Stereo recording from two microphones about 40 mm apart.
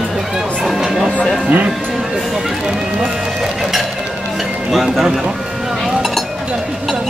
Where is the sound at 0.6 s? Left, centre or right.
Centre.